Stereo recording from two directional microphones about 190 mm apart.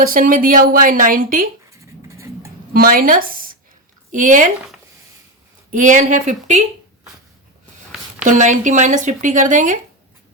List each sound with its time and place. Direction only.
0.0 s a woman's voice: 50° right (ahead or behind)
1.7 s vehicle: 15° right (ahead or behind)
2.7 s a woman's voice: 50° right (ahead or behind)
5.7 s speech: 40° right (ahead or behind)
8.2 s speech: 40° right (ahead or behind)